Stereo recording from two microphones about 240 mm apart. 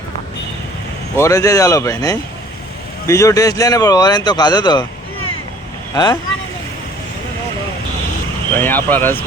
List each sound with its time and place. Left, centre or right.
1.1 s speech: centre
5.9 s speech: centre
8.5 s speech: centre